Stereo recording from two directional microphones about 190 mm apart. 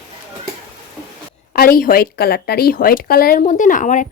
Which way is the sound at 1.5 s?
50° left (ahead or behind).